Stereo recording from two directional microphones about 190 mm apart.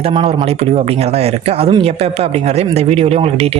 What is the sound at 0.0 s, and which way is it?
Speech, 30° right (ahead or behind).